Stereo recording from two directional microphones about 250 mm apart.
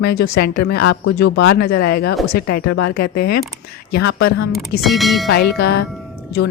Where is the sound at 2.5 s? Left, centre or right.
Left.